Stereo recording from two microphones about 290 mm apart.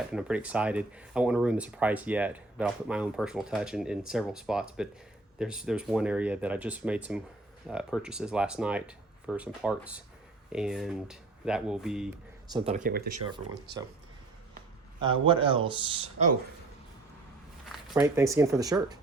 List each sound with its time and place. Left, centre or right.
0.1 s speech: centre
12.5 s speech: centre
15.0 s speech: centre
17.7 s speech: centre